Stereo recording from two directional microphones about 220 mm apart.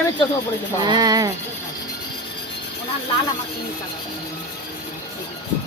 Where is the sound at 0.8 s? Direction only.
20° right (ahead or behind).